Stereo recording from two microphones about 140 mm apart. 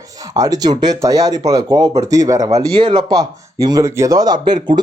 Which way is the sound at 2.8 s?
35° right (ahead or behind).